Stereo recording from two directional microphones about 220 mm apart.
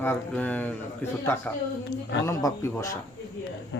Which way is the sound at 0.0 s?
10° left (ahead or behind).